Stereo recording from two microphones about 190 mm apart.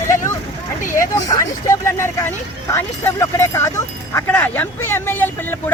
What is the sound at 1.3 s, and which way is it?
Speech, 15° left (ahead or behind).